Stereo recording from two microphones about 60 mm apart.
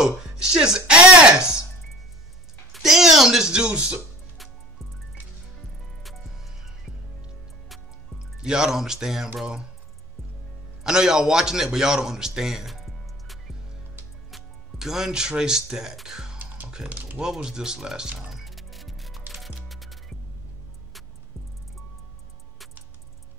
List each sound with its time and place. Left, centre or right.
0.0 s speech: centre
2.7 s speech: centre
5.9 s music: centre
8.4 s speech: centre
10.8 s a man's voice: centre
16.3 s music: right
16.6 s speech: centre
18.3 s music: centre